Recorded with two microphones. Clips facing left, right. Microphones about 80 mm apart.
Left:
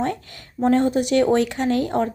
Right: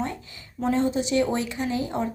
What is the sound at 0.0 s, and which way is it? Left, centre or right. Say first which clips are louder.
Speech: left 6 dB; left.